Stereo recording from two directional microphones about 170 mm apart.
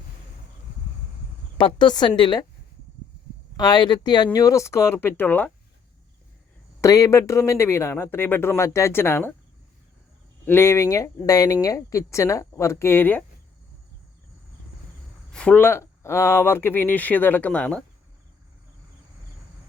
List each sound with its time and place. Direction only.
1.5 s speech: 30° left (ahead or behind)
3.6 s speech: 25° left (ahead or behind)
6.8 s speech: 20° left (ahead or behind)
10.4 s speech: 15° left (ahead or behind)
15.3 s speech: 5° left (ahead or behind)